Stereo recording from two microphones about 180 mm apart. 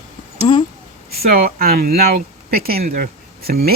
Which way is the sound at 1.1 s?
60° right (ahead or behind).